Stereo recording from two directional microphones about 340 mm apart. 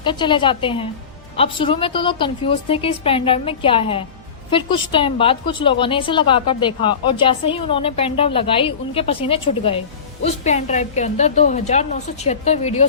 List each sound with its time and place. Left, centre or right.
0.0 s a woman's voice: centre